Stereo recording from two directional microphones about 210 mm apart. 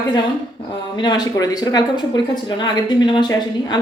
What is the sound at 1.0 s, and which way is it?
Speech, 20° left (ahead or behind).